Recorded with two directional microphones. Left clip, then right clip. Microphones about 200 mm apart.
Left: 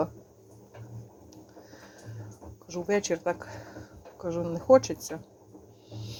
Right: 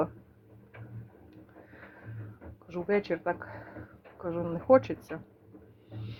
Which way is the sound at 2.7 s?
10° left (ahead or behind).